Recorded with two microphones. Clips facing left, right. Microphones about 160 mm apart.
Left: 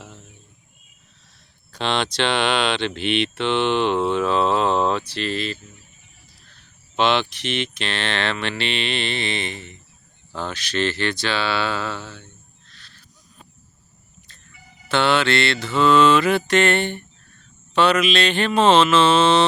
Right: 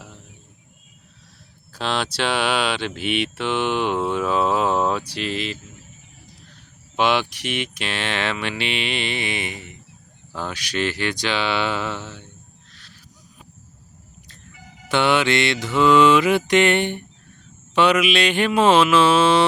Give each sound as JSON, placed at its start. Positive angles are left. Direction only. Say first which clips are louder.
{"t": 1.7, "sound": "speech", "louder": "left 2 dB", "side_deg": -5}
{"t": 12.7, "sound": "owl", "louder": "right 1 dB", "side_deg": -10}
{"t": 14.6, "sound": "music", "louder": "right 5 dB", "side_deg": -90}
{"t": 14.8, "sound": "speech", "louder": "even", "side_deg": -15}